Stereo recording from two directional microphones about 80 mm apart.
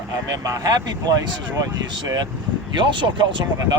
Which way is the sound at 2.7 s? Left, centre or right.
Right.